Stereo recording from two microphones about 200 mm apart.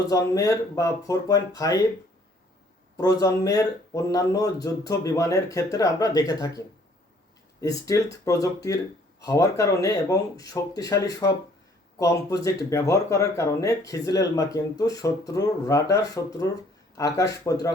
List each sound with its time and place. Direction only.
0.1 s speech: 15° left (ahead or behind)
3.0 s speech: 15° left (ahead or behind)
7.6 s speech: 15° left (ahead or behind)